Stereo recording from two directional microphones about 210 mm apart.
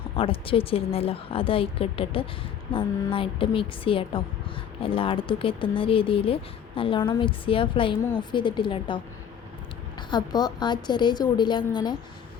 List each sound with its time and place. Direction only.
0.2 s speech: 25° left (ahead or behind)
10.1 s speech: 20° left (ahead or behind)